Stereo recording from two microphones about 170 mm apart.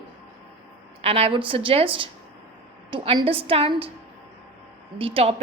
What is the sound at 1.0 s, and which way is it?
A woman's voice, 35° right (ahead or behind).